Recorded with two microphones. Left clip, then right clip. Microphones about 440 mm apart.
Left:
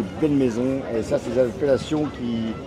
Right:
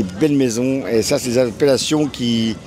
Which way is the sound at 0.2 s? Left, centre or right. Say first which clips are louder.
Right 4 dB; right.